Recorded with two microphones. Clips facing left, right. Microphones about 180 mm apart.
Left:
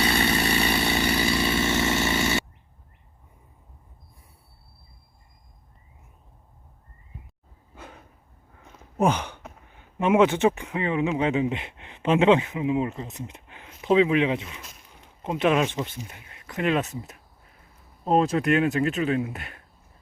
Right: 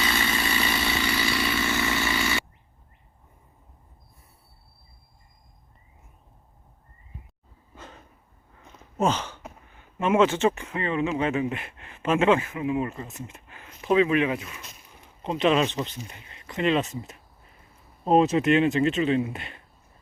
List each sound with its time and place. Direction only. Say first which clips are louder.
0.0 s chainsaw: left 4 dB; 35° left (ahead or behind)
0.4 s chainsaw: left 4 dB; 60° left (ahead or behind)
1.4 s a sound: left 3 dB; 25° left (ahead or behind)
7.8 s dog: left 1 dB; 10° left (ahead or behind)
9.0 s a sound: left 2 dB; 15° left (ahead or behind)
9.7 s speech: left 2 dB; 15° left (ahead or behind)